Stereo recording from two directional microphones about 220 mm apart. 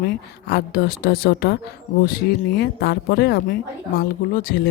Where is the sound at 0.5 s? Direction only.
45° left (ahead or behind).